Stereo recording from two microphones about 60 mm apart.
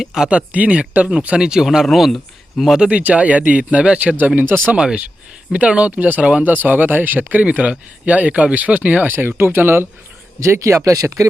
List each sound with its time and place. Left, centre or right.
0.0 s speech: centre
2.8 s speech: centre
4.4 s speech: right
4.8 s speech: centre
9.1 s speech: right
10.4 s speech: right